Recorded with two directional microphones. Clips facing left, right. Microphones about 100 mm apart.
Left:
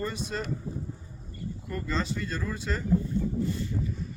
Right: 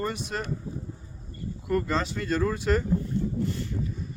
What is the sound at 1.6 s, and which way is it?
Speech, 60° right (ahead or behind).